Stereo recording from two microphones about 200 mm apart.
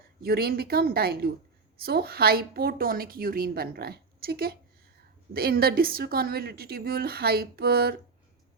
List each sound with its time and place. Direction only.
0.2 s a woman's voice: 50° right (ahead or behind)